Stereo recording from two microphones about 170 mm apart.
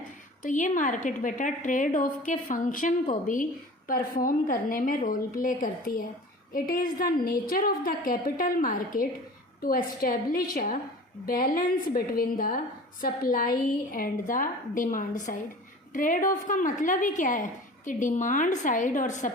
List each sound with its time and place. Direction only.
0.4 s a woman's voice: 50° left (ahead or behind)